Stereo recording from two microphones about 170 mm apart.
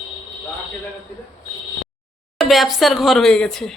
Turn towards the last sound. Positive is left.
turn(degrees=5)  # may be behind; listen again after turning